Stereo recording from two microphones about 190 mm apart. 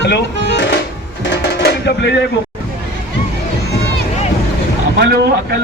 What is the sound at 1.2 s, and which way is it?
Music, 65° left (ahead or behind).